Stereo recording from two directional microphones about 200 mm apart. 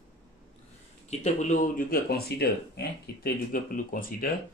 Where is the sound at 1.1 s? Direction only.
35° left (ahead or behind).